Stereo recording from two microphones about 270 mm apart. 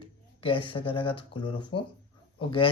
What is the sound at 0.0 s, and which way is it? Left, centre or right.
Speech, centre.